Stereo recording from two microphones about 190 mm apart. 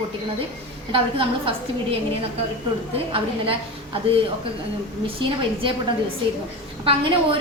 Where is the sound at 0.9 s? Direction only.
30° right (ahead or behind).